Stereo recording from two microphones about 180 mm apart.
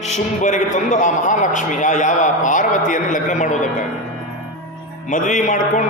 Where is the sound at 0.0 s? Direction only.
40° left (ahead or behind).